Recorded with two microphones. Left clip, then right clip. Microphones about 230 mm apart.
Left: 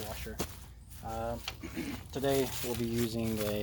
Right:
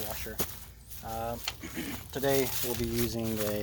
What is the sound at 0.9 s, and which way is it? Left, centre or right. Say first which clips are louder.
Speech: right 2 dB; right.